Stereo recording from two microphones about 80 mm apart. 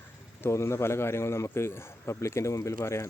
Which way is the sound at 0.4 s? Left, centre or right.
Left.